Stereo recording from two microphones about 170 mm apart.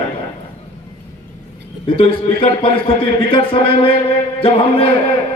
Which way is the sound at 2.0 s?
35° left (ahead or behind).